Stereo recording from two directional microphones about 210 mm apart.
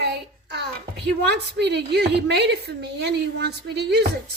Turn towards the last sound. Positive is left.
turn(degrees=-55)  # may be behind; listen again after turning